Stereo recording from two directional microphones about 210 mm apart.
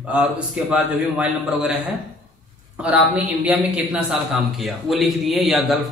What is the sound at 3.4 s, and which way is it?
A man's voice, 5° right (ahead or behind).